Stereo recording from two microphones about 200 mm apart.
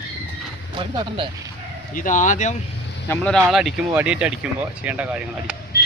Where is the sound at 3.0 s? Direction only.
5° left (ahead or behind).